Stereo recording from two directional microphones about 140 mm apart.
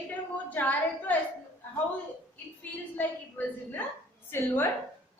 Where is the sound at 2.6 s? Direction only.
15° left (ahead or behind).